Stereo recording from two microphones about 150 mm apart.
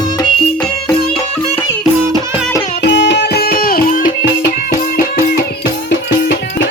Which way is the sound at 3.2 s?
90° left.